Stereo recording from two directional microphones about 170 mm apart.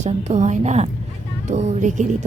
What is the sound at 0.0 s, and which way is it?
Speech, 45° right (ahead or behind).